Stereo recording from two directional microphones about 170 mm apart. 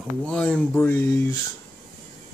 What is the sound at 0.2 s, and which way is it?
Speech, 5° left (ahead or behind).